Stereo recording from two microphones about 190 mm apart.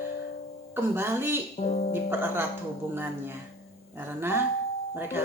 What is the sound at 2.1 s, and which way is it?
Speech, 10° right (ahead or behind).